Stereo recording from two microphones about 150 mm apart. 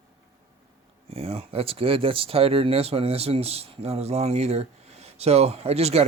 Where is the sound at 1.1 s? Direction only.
40° right (ahead or behind).